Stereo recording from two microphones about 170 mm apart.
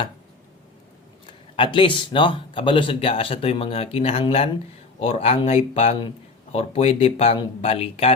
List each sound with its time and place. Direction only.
1.3 s speech: 30° left (ahead or behind)